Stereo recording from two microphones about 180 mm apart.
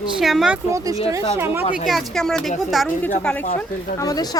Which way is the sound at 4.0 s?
20° left (ahead or behind).